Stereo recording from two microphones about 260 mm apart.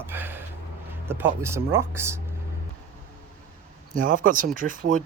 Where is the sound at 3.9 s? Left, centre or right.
Right.